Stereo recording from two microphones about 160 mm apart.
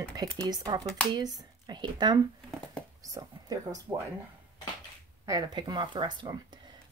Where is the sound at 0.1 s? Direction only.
25° right (ahead or behind).